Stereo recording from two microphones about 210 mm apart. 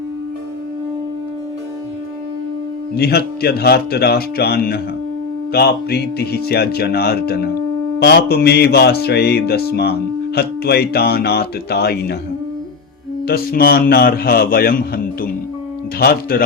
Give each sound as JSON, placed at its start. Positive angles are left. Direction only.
{"t": 2.9, "sound": "speech", "side_deg": 50}
{"t": 13.2, "sound": "speech", "side_deg": 45}